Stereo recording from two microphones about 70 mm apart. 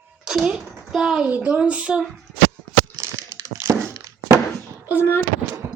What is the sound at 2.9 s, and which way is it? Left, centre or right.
Crumpling, right.